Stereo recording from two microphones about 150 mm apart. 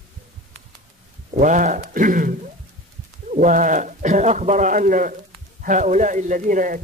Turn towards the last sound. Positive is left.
turn(degrees=-60)  # may be behind; listen again after turning